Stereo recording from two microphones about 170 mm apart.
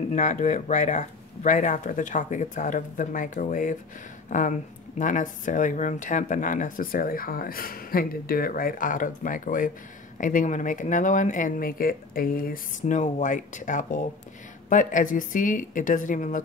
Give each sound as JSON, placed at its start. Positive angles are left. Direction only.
{"t": 0.1, "sound": "speech", "side_deg": 45}